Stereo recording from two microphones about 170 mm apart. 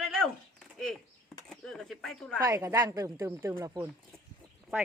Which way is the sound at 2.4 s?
20° right (ahead or behind).